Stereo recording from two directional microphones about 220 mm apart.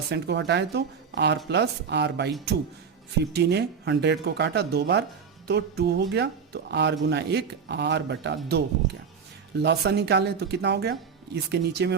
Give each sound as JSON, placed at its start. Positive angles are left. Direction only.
{"t": 0.1, "sound": "speech", "side_deg": -50}
{"t": 3.3, "sound": "speech", "side_deg": -50}